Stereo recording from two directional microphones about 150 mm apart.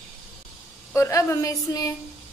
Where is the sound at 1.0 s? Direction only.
20° left (ahead or behind).